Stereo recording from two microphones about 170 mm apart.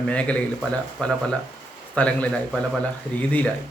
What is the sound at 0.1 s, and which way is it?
Speech, 5° left (ahead or behind).